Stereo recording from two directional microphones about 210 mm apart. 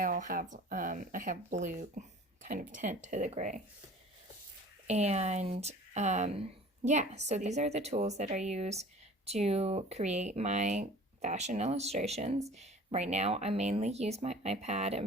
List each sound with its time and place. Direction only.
0.0 s speech: 40° right (ahead or behind)
4.9 s speech: 30° right (ahead or behind)